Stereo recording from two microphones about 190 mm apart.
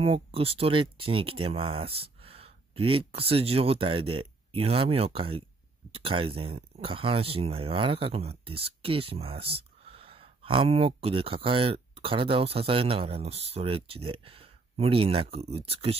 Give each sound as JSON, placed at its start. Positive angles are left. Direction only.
{"t": 0.0, "sound": "speech", "side_deg": -30}